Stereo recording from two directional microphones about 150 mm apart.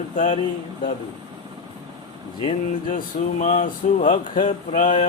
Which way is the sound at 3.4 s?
55° left (ahead or behind).